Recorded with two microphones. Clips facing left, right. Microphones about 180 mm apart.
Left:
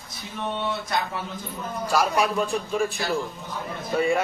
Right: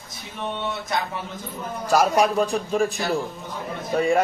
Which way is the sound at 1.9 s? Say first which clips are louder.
Right 4 dB; 45° right (ahead or behind).